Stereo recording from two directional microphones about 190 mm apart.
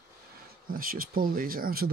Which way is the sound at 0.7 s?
50° right (ahead or behind).